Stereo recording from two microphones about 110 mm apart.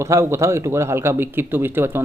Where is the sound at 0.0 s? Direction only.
25° right (ahead or behind).